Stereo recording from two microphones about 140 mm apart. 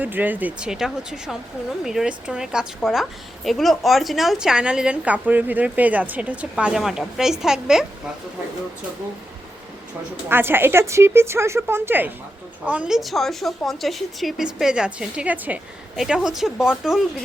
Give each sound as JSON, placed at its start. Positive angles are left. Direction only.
{"t": 0.0, "sound": "a woman's voice", "side_deg": -10}
{"t": 10.2, "sound": "a woman's voice", "side_deg": -15}